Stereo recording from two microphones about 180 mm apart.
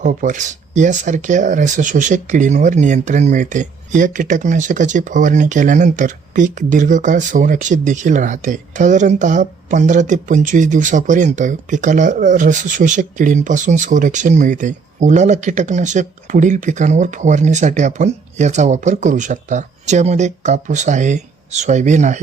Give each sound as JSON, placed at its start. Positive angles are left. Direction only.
{"t": 0.0, "sound": "speech", "side_deg": -45}